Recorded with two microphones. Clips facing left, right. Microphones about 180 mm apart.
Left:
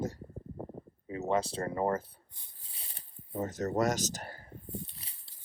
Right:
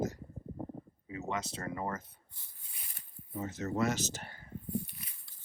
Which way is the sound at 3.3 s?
45° left (ahead or behind).